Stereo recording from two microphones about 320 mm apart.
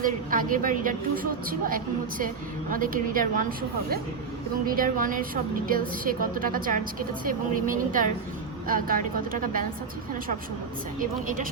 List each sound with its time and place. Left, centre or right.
0.0 s a woman's voice: right
4.6 s a woman's voice: right
11.0 s a woman's voice: right